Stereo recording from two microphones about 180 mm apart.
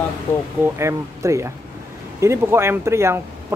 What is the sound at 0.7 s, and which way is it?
Speech, 15° right (ahead or behind).